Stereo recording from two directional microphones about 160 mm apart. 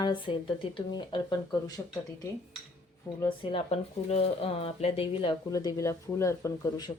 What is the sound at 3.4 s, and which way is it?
Speech, 35° left (ahead or behind).